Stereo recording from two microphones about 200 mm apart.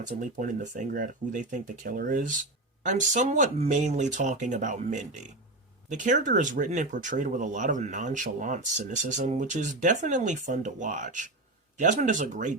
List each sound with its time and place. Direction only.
0.2 s speech: 40° right (ahead or behind)